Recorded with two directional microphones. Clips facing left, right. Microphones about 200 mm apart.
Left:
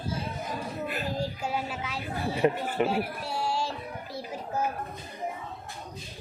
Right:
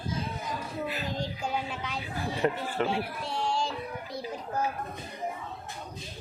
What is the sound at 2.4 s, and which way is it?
A child's voice, 15° left (ahead or behind).